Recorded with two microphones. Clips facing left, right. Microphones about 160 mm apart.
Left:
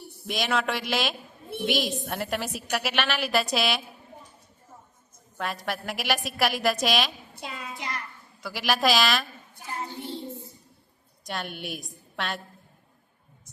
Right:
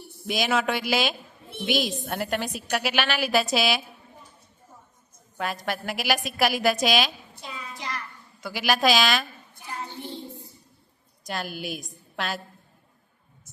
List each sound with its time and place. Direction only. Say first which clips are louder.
0.3 s a woman's voice: right 2 dB; centre (ahead or behind)
5.4 s a woman's voice: right 2 dB; centre (ahead or behind)
7.3 s hands: left 2 dB; 60° left (ahead or behind)
7.8 s child singing: right 1 dB; 25° left (ahead or behind)
8.4 s a woman's voice: right 2 dB; centre (ahead or behind)
11.2 s a woman's voice: right 2 dB; centre (ahead or behind)